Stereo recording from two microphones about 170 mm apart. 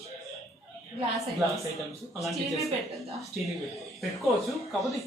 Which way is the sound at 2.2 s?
Centre (ahead or behind).